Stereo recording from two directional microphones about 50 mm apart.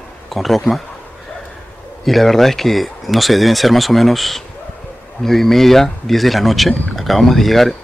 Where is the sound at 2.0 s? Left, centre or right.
Centre.